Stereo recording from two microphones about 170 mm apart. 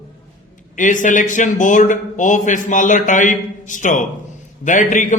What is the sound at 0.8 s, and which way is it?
A man's voice, 50° left (ahead or behind).